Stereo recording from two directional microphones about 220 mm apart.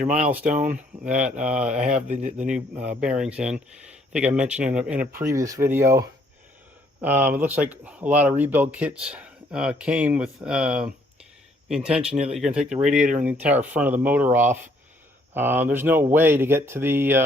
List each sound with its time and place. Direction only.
0.1 s speech: 5° right (ahead or behind)
0.5 s speech: 35° right (ahead or behind)
1.0 s speech: 5° right (ahead or behind)
2.0 s speech: 30° right (ahead or behind)
2.5 s speech: 5° right (ahead or behind)